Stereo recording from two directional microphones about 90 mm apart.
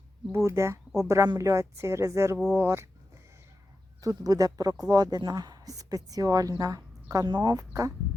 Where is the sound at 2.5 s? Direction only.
30° right (ahead or behind).